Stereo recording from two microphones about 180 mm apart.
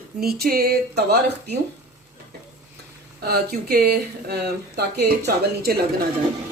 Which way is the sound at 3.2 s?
60° right (ahead or behind).